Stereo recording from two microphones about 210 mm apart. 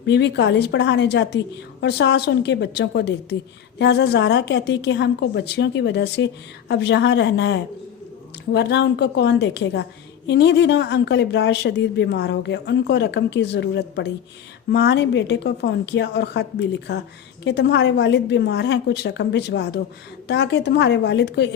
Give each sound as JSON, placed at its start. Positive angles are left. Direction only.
{"t": 0.1, "sound": "a woman's voice", "side_deg": 55}